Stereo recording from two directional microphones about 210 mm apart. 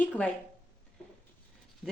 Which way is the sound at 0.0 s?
10° left (ahead or behind).